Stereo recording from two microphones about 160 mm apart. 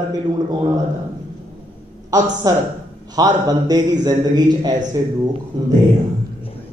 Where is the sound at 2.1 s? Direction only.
20° right (ahead or behind).